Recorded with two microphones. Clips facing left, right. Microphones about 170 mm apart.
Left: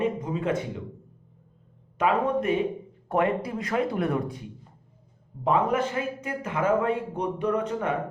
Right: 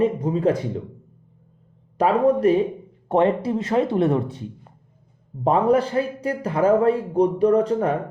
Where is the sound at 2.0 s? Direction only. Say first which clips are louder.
Right 7 dB; 35° right (ahead or behind).